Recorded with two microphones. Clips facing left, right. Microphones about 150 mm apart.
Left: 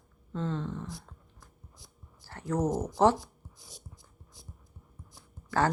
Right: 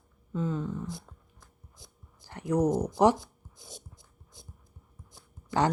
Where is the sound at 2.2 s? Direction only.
15° right (ahead or behind).